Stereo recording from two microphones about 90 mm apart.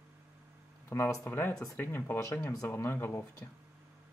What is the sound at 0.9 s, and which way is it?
Speech, 20° left (ahead or behind).